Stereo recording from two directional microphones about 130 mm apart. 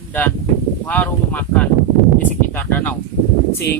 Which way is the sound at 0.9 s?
10° left (ahead or behind).